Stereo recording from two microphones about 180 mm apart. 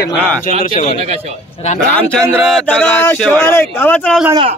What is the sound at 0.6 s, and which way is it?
Speech, 50° left (ahead or behind).